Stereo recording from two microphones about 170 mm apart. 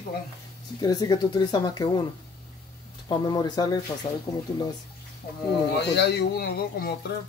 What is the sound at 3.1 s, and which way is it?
Speech, 25° left (ahead or behind).